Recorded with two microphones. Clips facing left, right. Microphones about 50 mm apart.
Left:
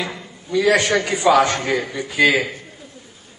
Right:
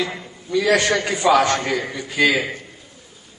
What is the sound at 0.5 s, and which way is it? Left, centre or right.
Speech, centre.